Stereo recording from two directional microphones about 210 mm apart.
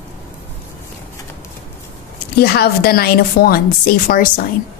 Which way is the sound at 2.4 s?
50° left (ahead or behind).